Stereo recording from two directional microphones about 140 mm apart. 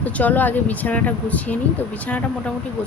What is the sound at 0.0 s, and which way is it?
Speech, 10° left (ahead or behind).